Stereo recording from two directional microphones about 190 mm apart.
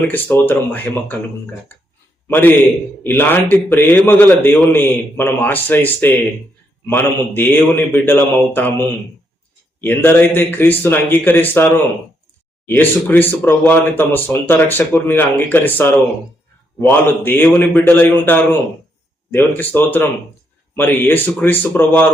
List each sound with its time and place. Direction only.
0.1 s speech: 10° left (ahead or behind)
2.2 s a man's voice: 10° left (ahead or behind)
9.8 s speech: 10° left (ahead or behind)
17.2 s speech: 10° left (ahead or behind)